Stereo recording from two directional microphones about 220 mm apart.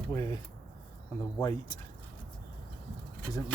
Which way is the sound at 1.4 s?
15° left (ahead or behind).